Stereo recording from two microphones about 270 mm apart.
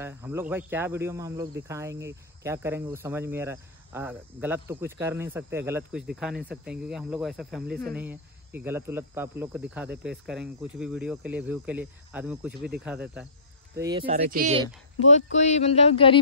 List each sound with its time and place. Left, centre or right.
0.0 s speech: centre
6.3 s speech: right
6.7 s speech: centre
7.6 s speech: right
7.9 s speech: centre
13.7 s speech: centre
14.1 s speech: right
15.0 s speech: left